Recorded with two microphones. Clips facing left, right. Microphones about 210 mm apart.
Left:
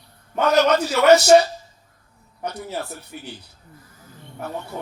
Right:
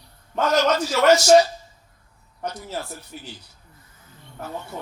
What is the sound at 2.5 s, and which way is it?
Speech, 60° left (ahead or behind).